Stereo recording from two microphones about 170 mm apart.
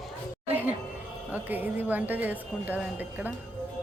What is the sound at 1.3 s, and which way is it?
Speech, 10° right (ahead or behind).